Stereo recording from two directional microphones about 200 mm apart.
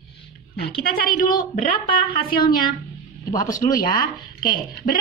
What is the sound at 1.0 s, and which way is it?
A woman's voice, 45° left (ahead or behind).